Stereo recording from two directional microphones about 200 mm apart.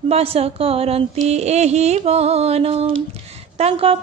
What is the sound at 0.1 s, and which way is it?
Speech, 30° right (ahead or behind).